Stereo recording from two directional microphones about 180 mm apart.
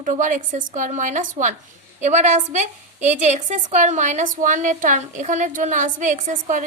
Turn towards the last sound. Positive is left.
turn(degrees=-45)  # may be behind; listen again after turning